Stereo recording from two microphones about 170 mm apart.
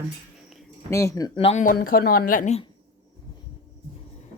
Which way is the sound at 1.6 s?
55° left (ahead or behind).